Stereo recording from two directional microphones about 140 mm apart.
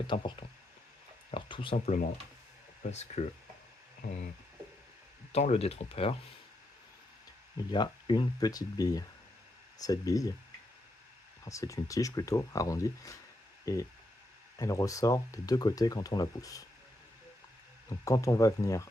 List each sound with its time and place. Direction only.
0.1 s speech: 35° left (ahead or behind)
1.3 s a sound: 40° left (ahead or behind)
1.7 s speech: 55° left (ahead or behind)
5.3 s speech: 50° left (ahead or behind)
7.5 s speech: 30° left (ahead or behind)
11.4 s speech: 25° left (ahead or behind)
17.8 s speech: 20° left (ahead or behind)